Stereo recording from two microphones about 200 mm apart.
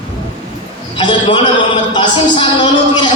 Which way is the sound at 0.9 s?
25° left (ahead or behind).